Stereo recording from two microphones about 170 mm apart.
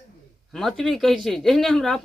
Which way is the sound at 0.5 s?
Centre (ahead or behind).